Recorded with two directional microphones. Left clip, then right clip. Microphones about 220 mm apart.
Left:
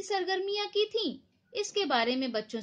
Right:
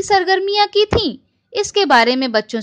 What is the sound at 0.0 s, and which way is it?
A woman's voice, 40° right (ahead or behind).